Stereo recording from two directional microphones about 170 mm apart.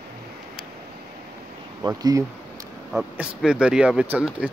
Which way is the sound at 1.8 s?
15° right (ahead or behind).